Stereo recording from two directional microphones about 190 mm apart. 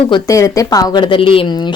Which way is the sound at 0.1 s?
15° left (ahead or behind).